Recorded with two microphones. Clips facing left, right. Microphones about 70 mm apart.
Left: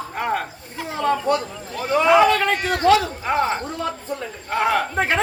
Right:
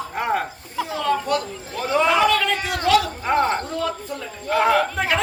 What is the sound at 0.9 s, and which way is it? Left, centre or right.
Speech, left.